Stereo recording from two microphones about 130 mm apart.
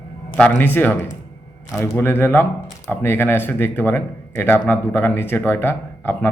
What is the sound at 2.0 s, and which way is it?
Speech, 15° left (ahead or behind).